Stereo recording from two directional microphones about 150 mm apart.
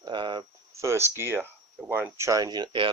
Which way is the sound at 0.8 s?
15° right (ahead or behind).